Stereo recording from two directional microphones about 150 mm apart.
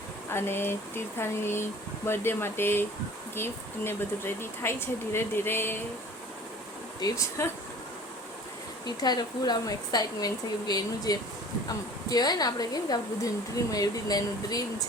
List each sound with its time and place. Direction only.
0.3 s speech: 15° left (ahead or behind)
7.0 s speech: 20° left (ahead or behind)
9.0 s a woman's voice: 25° left (ahead or behind)